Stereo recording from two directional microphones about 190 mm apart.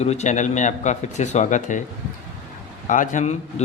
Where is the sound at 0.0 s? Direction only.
35° left (ahead or behind).